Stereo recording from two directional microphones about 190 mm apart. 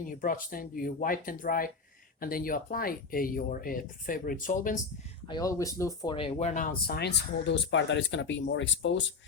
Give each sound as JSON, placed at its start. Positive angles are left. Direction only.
{"t": 0.2, "sound": "speech", "side_deg": 45}
{"t": 5.3, "sound": "speech", "side_deg": 20}